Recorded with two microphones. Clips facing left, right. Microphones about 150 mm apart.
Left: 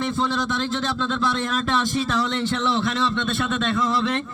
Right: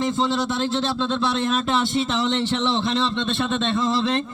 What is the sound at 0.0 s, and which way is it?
A man's voice, 25° right (ahead or behind).